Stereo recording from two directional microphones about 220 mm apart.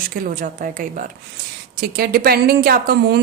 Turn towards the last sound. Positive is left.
turn(degrees=-45)  # may be behind; listen again after turning